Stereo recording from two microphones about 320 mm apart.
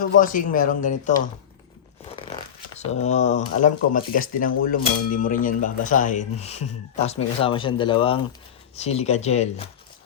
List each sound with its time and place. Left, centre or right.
0.0 s speech: left